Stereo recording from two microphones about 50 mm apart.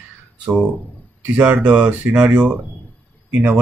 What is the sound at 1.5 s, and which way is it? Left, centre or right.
Speech, right.